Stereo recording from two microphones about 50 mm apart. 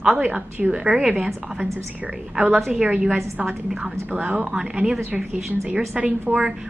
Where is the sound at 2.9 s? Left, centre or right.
Right.